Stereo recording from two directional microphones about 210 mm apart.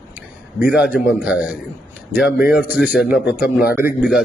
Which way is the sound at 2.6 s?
5° right (ahead or behind).